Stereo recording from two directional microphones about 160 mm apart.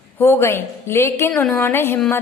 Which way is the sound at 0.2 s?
15° left (ahead or behind).